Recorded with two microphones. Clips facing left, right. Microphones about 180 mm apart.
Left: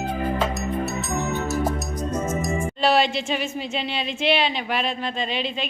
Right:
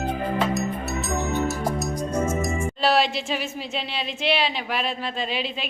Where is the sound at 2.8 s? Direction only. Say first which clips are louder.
Left 1 dB; centre (ahead or behind).